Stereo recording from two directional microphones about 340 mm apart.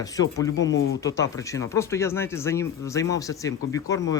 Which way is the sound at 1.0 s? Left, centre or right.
Centre.